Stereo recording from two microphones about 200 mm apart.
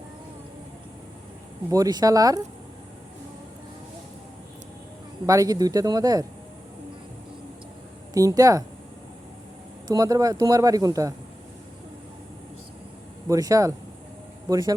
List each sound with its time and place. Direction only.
1.7 s a man's voice: 20° right (ahead or behind)
5.2 s a man's voice: 15° right (ahead or behind)
8.1 s a man's voice: 15° right (ahead or behind)
9.8 s a man's voice: 15° right (ahead or behind)
13.2 s a man's voice: 15° right (ahead or behind)